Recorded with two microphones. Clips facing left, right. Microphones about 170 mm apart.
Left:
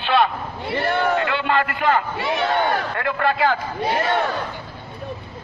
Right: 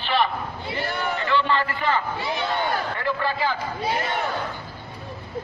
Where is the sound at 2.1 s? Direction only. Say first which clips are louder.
Left 5 dB; 70° left (ahead or behind).